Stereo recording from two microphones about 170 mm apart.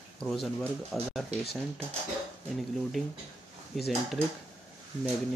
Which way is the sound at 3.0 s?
Centre (ahead or behind).